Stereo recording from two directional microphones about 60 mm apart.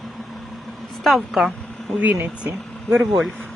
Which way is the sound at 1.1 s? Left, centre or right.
Centre.